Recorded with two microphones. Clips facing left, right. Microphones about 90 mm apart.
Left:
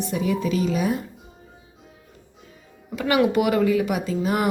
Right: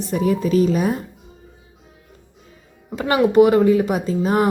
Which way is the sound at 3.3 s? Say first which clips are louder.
Right 7 dB; 30° right (ahead or behind).